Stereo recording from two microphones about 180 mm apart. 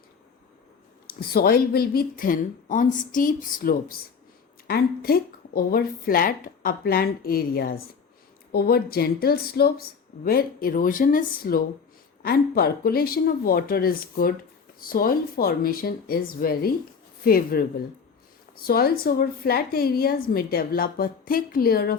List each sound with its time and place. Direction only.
1.0 s a woman's voice: 60° left (ahead or behind)